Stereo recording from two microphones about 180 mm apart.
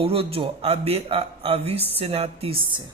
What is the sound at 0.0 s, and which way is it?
Speech, 30° right (ahead or behind).